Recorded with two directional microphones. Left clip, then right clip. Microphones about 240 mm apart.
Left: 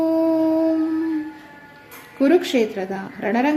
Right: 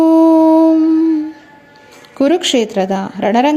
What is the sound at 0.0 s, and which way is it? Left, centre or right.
Howl, right.